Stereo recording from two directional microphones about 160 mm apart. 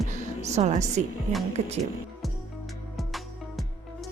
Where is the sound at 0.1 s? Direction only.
45° right (ahead or behind).